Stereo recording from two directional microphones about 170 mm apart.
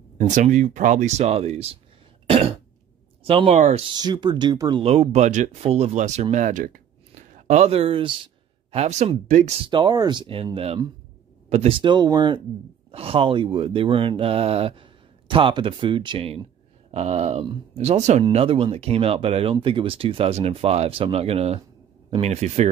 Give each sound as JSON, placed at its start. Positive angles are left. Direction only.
{"t": 0.2, "sound": "speech", "side_deg": -45}
{"t": 2.2, "sound": "cough", "side_deg": -35}
{"t": 3.3, "sound": "speech", "side_deg": -30}
{"t": 4.8, "sound": "speech", "side_deg": -40}
{"t": 7.4, "sound": "speech", "side_deg": -40}
{"t": 9.7, "sound": "speech", "side_deg": -25}